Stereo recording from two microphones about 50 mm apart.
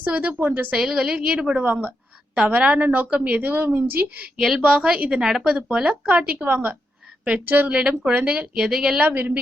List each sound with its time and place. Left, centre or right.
0.0 s a woman's voice: right
0.3 s a woman's voice: right
0.8 s a woman's voice: centre
1.6 s a woman's voice: right
2.3 s a woman's voice: right
4.4 s a woman's voice: centre
4.6 s a woman's voice: right
6.2 s a woman's voice: right
7.7 s a woman's voice: right
9.0 s a woman's voice: right